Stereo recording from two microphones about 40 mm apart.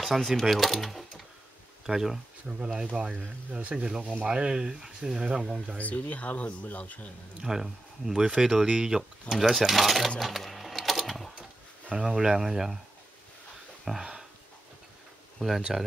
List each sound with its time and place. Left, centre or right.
0.3 s speech: centre
1.9 s speech: centre
2.4 s speech: right
3.7 s speech: centre
4.0 s speech: right
4.3 s speech: right
5.8 s speech: left
7.4 s speech: centre
9.3 s speech: centre
11.9 s speech: centre
13.9 s speech: centre
15.3 s speech: centre